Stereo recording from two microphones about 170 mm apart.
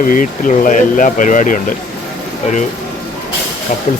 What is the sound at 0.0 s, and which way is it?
Speech, 50° left (ahead or behind).